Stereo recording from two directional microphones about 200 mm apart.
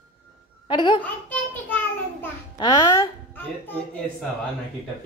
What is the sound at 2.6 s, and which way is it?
A child's voice, 20° left (ahead or behind).